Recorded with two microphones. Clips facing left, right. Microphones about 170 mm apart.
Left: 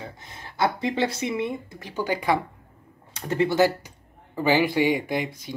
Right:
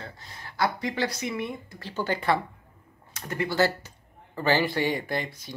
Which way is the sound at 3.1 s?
25° left (ahead or behind).